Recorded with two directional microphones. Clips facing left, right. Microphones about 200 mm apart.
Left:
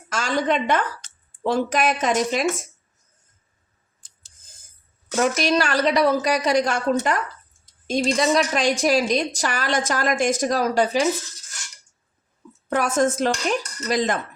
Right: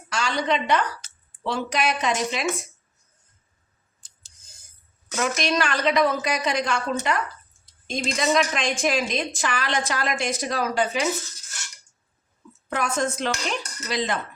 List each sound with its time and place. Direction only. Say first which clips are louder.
0.1 s a woman's voice: left 3 dB; 45° left (ahead or behind)
5.1 s a woman's voice: left 4 dB; 40° left (ahead or behind)
12.7 s a woman's voice: left 5 dB; 45° left (ahead or behind)